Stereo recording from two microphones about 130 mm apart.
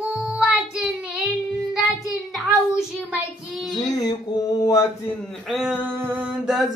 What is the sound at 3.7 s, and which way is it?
Mantra, 30° left (ahead or behind).